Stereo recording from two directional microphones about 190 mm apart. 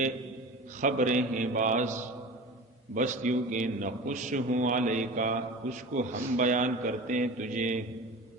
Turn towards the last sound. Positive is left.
turn(degrees=-40)  # may be behind; listen again after turning